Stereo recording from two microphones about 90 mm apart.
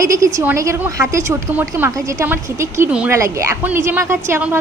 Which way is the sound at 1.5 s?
25° right (ahead or behind).